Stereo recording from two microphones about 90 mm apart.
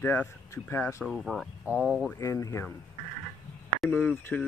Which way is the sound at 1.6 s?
15° right (ahead or behind).